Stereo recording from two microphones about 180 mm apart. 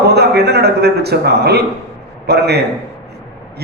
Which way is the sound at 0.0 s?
65° right (ahead or behind).